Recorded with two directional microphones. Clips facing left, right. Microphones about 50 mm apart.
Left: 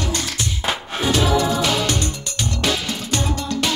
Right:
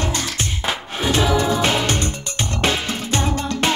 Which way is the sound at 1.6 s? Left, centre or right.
Right.